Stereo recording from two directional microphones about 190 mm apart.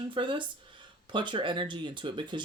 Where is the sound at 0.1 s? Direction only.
25° right (ahead or behind).